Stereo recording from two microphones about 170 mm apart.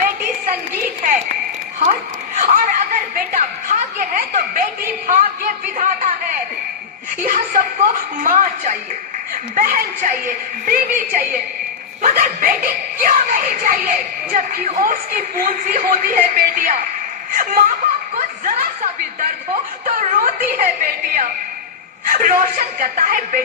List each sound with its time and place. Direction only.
1.8 s a sound: 45° right (ahead or behind)
7.2 s a sound: 55° right (ahead or behind)
8.2 s music: 50° right (ahead or behind)
9.3 s a woman's voice: 55° right (ahead or behind)
12.0 s music: 50° right (ahead or behind)
17.4 s laughter: 55° right (ahead or behind)
18.2 s chuckle: 50° right (ahead or behind)
19.8 s music: 50° right (ahead or behind)
22.0 s a woman's voice: 50° right (ahead or behind)